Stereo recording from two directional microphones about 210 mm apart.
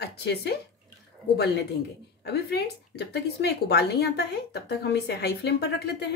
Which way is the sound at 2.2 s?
50° left (ahead or behind).